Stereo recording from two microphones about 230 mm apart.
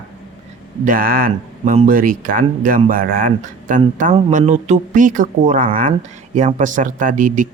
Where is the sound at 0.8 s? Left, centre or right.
Right.